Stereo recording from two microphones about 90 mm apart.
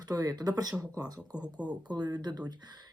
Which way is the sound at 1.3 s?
10° right (ahead or behind).